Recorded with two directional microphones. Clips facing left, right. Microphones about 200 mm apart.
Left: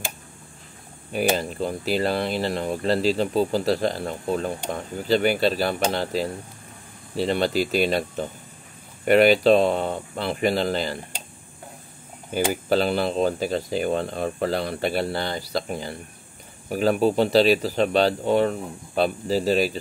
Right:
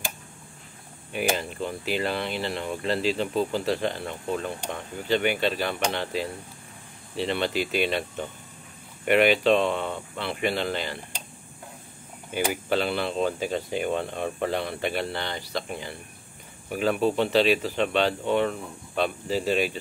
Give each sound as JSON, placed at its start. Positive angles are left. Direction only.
{"t": 1.1, "sound": "speech", "side_deg": 40}
{"t": 12.6, "sound": "speech", "side_deg": 40}